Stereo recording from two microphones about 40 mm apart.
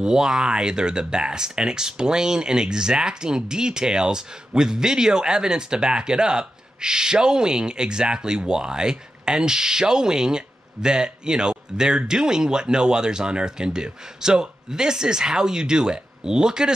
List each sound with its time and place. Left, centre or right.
0.0 s speech: centre